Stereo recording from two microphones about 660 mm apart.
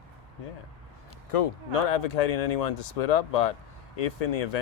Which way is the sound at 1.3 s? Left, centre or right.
Left.